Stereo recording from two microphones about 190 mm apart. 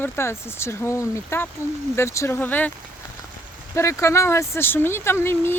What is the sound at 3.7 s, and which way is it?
Speech, 15° left (ahead or behind).